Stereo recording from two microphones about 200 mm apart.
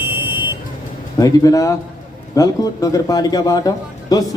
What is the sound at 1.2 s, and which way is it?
A man's voice, 15° left (ahead or behind).